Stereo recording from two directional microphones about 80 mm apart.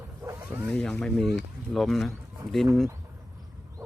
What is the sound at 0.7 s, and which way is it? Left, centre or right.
Speech, centre.